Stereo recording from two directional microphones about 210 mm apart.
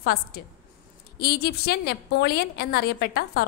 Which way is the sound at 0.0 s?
45° left (ahead or behind).